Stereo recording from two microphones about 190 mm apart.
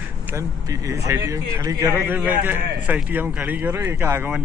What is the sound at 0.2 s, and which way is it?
Speech, 15° right (ahead or behind).